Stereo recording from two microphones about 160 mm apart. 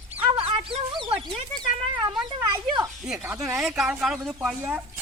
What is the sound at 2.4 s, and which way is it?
Speech, 20° right (ahead or behind).